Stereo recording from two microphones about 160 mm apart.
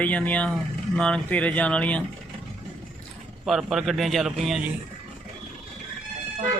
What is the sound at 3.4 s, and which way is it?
Speech, centre (ahead or behind).